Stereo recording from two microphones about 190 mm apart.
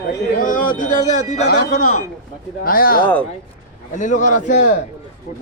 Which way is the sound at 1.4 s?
60° left (ahead or behind).